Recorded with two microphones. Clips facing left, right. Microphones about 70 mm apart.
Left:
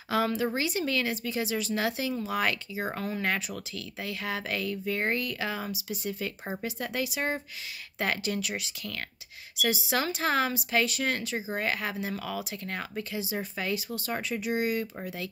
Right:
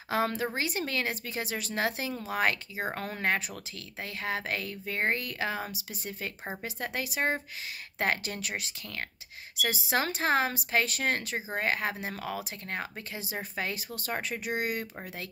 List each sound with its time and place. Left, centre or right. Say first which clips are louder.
0.1 s speech: left 2 dB; right
13.2 s speech: right 1 dB; right